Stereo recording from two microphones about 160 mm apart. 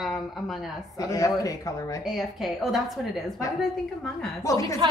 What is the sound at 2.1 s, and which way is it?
Speech, centre (ahead or behind).